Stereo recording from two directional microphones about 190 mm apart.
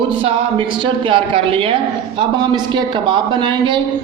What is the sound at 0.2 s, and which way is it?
A man's voice, 30° right (ahead or behind).